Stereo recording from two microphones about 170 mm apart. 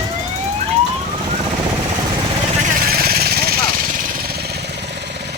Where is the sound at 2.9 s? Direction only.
60° right (ahead or behind).